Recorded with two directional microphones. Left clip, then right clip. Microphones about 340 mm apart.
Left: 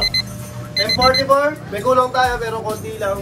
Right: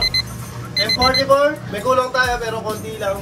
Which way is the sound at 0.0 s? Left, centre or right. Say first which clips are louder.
Even; centre.